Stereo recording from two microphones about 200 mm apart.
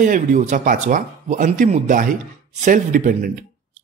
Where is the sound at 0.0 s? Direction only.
40° right (ahead or behind).